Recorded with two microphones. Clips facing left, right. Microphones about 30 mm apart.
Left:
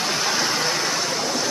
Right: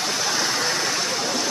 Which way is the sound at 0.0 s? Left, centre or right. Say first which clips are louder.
Left 1 dB; centre.